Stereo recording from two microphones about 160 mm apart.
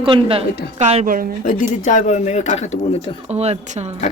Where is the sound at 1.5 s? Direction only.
50° left (ahead or behind).